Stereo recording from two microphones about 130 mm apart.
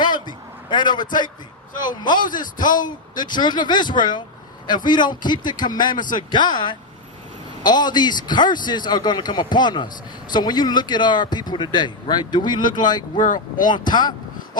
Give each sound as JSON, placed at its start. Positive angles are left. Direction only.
{"t": 0.0, "sound": "a sound", "side_deg": 35}
{"t": 1.8, "sound": "speech", "side_deg": 35}
{"t": 13.1, "sound": "speech", "side_deg": 85}
{"t": 13.9, "sound": "speech", "side_deg": 35}